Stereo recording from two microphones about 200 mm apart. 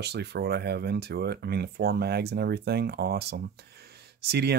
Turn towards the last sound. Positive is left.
turn(degrees=-55)  # may be behind; listen again after turning